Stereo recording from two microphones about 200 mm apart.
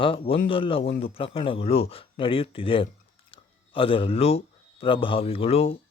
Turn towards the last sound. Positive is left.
turn(degrees=30)  # may be behind; listen again after turning